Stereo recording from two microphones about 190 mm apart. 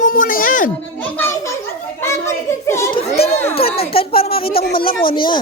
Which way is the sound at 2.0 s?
15° left (ahead or behind).